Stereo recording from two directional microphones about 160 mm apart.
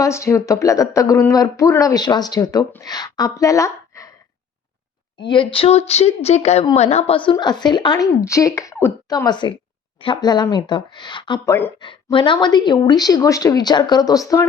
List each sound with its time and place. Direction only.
0.0 s speech: 20° left (ahead or behind)
5.2 s a woman's voice: 30° left (ahead or behind)